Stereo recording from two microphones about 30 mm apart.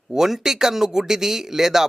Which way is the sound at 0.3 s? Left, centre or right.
Centre.